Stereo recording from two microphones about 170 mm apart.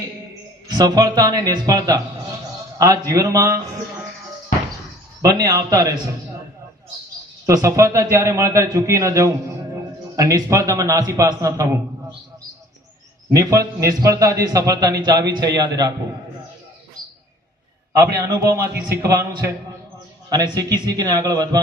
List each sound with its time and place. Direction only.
0.7 s a man's voice: 25° right (ahead or behind)
5.2 s a man's voice: 20° right (ahead or behind)
7.4 s a man's voice: 20° right (ahead or behind)
13.3 s a man's voice: 20° right (ahead or behind)
17.0 s bird: 25° right (ahead or behind)
18.2 s a man's voice: 20° right (ahead or behind)
20.3 s a man's voice: 25° right (ahead or behind)